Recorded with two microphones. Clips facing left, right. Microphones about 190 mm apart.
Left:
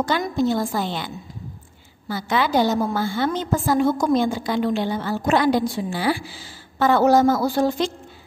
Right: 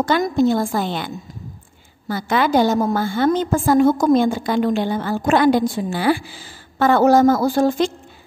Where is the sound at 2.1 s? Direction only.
50° right (ahead or behind).